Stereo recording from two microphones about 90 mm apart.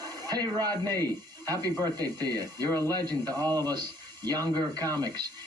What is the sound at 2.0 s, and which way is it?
Speech, 45° right (ahead or behind).